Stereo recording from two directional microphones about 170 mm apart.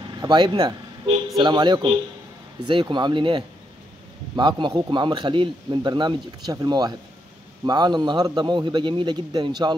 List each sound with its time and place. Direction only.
0.2 s speech: 25° right (ahead or behind)